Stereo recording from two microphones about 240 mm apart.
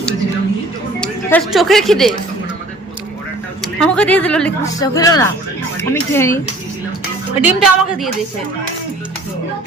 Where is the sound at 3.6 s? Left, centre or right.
Centre.